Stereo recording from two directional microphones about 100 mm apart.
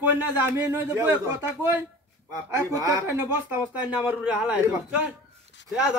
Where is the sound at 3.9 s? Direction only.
15° right (ahead or behind).